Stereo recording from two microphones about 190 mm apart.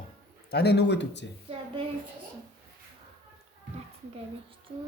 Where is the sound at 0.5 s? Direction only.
60° left (ahead or behind).